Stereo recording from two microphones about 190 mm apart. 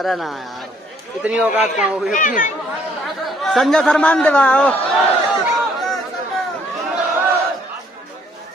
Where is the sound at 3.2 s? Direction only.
Centre (ahead or behind).